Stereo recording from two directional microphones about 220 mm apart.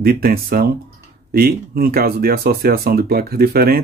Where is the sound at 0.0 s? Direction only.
40° right (ahead or behind).